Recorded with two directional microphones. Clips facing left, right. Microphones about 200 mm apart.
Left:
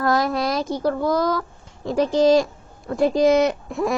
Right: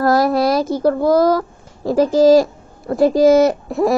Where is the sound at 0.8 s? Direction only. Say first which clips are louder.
Right 7 dB; 40° right (ahead or behind).